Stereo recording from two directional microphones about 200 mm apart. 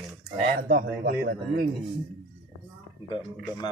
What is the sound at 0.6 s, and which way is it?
Speech, 45° right (ahead or behind).